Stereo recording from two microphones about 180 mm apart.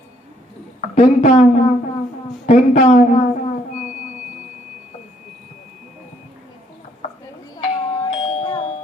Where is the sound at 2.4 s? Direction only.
35° left (ahead or behind).